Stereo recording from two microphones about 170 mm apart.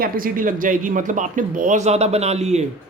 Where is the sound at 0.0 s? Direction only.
55° right (ahead or behind).